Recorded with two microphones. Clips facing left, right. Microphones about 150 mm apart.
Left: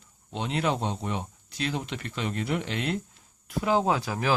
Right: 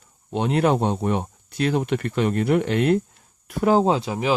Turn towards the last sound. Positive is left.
turn(degrees=-20)  # may be behind; listen again after turning